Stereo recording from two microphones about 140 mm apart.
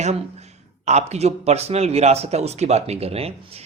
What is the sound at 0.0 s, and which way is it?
Speech, 50° right (ahead or behind).